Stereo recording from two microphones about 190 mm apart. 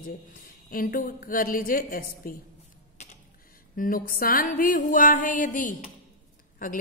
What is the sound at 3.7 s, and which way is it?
A woman's voice, 45° left (ahead or behind).